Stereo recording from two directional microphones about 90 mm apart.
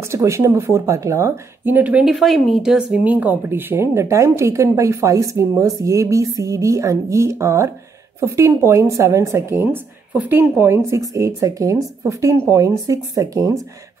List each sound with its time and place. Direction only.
0.1 s speech: 30° right (ahead or behind)
1.6 s speech: 20° right (ahead or behind)
10.1 s speech: 15° right (ahead or behind)
10.9 s speech: 35° right (ahead or behind)